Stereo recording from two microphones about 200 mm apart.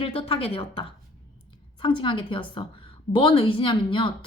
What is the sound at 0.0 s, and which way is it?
A woman's voice, 30° left (ahead or behind).